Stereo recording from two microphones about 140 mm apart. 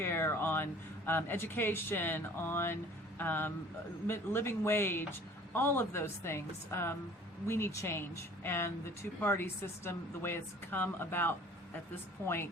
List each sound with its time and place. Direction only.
0.0 s speech: 15° left (ahead or behind)